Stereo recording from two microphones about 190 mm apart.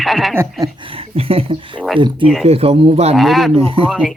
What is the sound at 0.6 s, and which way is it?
Speech, 25° right (ahead or behind).